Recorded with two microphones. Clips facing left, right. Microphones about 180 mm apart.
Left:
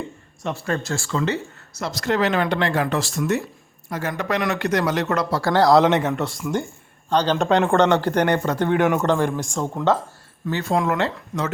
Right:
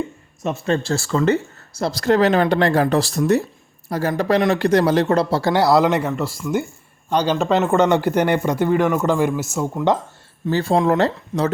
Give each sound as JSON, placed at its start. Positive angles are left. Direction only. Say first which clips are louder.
{"t": 0.4, "sound": "speech", "louder": "right 4 dB", "side_deg": -20}
{"t": 1.8, "sound": "speech", "louder": "right 5 dB", "side_deg": -35}
{"t": 5.5, "sound": "speech", "louder": "left 1 dB", "side_deg": -5}
{"t": 10.4, "sound": "speech", "louder": "right 4 dB", "side_deg": -30}